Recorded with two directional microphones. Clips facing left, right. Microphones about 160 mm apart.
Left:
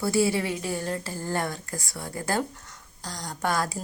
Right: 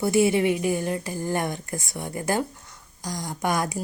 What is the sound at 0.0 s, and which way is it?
A woman's voice, 20° right (ahead or behind).